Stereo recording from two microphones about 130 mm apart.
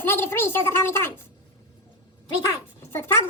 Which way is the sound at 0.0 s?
15° left (ahead or behind).